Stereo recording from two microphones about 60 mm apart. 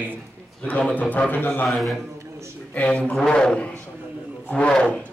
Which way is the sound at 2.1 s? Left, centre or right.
Right.